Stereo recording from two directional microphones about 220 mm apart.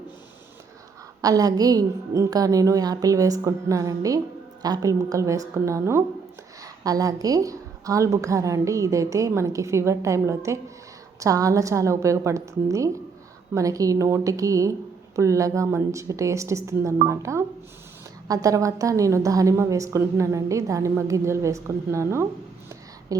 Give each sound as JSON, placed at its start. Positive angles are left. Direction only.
{"t": 1.2, "sound": "a woman's voice", "side_deg": -15}
{"t": 18.4, "sound": "a woman's voice", "side_deg": -15}